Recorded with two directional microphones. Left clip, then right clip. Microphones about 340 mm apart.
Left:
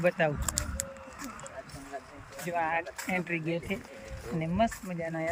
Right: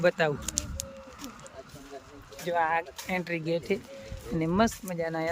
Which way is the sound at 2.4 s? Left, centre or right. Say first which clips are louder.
Right 4 dB; centre.